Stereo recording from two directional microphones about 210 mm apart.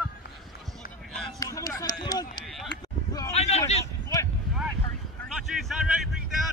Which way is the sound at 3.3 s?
30° left (ahead or behind).